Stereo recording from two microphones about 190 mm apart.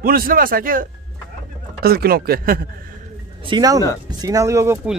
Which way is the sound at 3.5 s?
20° right (ahead or behind).